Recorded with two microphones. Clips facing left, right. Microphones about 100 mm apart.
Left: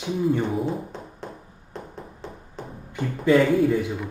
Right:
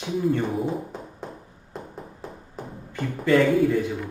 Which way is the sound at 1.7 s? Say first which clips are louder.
Even; 5° right (ahead or behind).